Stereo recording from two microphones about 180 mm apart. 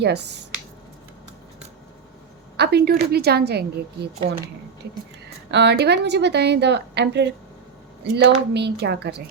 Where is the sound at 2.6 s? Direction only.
60° right (ahead or behind).